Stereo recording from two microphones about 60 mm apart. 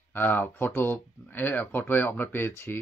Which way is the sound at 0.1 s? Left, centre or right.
Left.